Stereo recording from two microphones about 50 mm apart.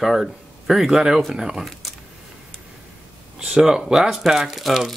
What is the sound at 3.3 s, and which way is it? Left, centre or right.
Speech, centre.